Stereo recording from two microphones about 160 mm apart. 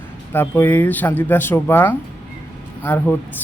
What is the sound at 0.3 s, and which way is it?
Speech, 15° left (ahead or behind).